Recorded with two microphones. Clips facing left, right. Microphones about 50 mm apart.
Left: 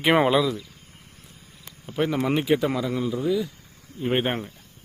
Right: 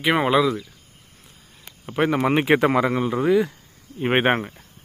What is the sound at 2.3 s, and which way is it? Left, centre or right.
Speech, right.